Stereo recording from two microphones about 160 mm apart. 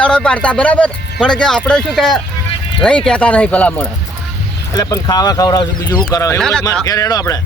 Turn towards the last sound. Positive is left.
turn(degrees=20)  # may be behind; listen again after turning